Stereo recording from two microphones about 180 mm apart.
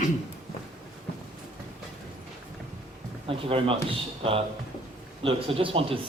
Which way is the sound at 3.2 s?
30° right (ahead or behind).